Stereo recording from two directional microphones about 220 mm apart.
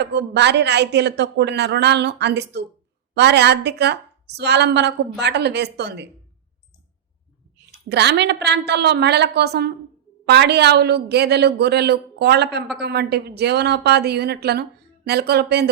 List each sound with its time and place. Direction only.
0.0 s a woman's voice: 50° right (ahead or behind)
7.9 s a woman's voice: 50° right (ahead or behind)